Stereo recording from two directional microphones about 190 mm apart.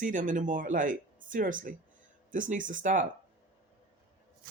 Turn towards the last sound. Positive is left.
turn(degrees=-45)  # may be behind; listen again after turning